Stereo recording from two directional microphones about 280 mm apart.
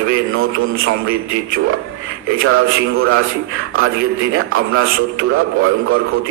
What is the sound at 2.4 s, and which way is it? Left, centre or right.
Speech, right.